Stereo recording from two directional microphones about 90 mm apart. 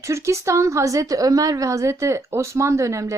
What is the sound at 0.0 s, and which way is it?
Speech, 35° right (ahead or behind).